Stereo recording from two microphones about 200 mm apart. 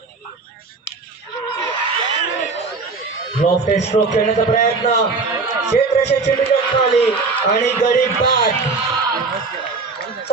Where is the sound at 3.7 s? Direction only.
35° left (ahead or behind).